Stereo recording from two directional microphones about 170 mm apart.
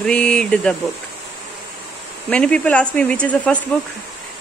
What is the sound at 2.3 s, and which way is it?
A woman's voice, 5° left (ahead or behind).